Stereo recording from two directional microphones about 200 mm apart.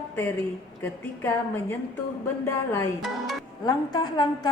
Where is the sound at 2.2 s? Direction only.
10° left (ahead or behind).